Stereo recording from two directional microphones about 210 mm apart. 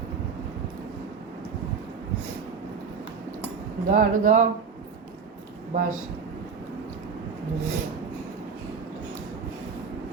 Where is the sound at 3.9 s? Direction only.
40° right (ahead or behind).